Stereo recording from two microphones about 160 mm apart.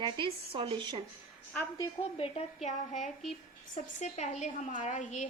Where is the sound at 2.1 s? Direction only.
35° left (ahead or behind).